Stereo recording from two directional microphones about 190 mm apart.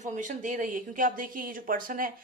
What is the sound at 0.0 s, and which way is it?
Speech, 40° right (ahead or behind).